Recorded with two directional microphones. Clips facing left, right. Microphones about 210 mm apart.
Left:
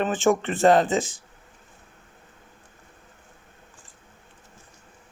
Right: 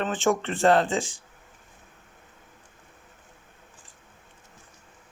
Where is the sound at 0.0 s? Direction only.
15° left (ahead or behind).